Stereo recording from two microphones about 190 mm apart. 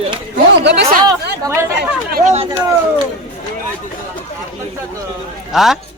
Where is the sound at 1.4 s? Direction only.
15° right (ahead or behind).